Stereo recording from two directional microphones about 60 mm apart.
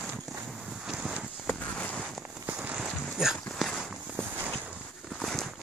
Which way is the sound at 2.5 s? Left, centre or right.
Right.